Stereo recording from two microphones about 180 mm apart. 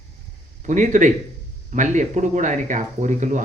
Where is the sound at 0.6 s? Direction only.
45° right (ahead or behind).